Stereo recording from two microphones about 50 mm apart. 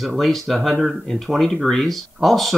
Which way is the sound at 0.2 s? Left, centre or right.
Centre.